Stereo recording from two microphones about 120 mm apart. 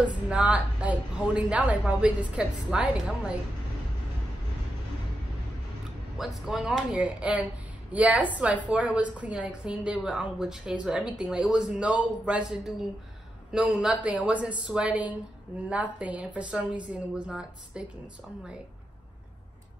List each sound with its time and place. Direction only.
0.3 s a woman's voice: 10° right (ahead or behind)
6.1 s a woman's voice: 5° right (ahead or behind)